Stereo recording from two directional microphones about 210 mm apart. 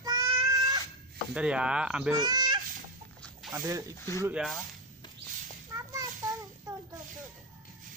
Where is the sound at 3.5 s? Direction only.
20° right (ahead or behind).